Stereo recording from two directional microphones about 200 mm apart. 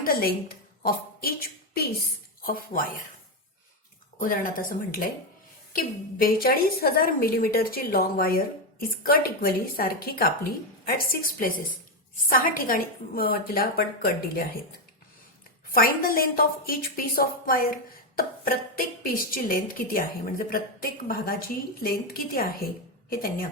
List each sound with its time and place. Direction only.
0.0 s a woman's voice: 50° left (ahead or behind)
4.2 s a woman's voice: 45° left (ahead or behind)
15.7 s a woman's voice: 45° left (ahead or behind)